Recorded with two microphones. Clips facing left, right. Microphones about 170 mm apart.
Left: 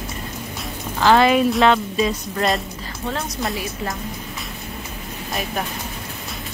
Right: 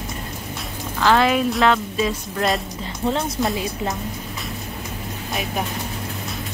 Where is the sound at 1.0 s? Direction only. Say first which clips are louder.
Left 3 dB; 5° left (ahead or behind).